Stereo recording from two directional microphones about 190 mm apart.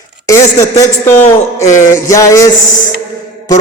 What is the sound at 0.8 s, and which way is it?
A man's voice, 10° left (ahead or behind).